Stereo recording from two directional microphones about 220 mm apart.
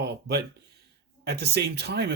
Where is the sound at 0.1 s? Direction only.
50° right (ahead or behind).